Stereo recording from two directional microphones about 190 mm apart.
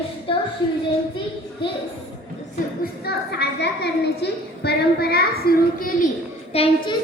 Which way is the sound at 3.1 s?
60° left (ahead or behind).